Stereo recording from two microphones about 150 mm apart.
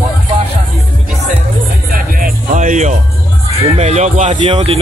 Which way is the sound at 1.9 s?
70° right (ahead or behind).